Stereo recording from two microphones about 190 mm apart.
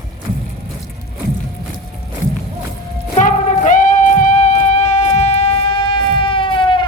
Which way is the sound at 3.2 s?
40° left (ahead or behind).